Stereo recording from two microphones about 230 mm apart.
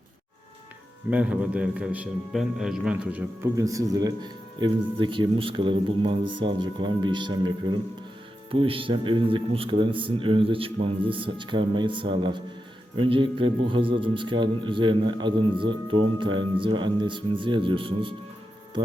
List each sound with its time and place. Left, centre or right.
1.1 s a man's voice: centre; by 18.1 s right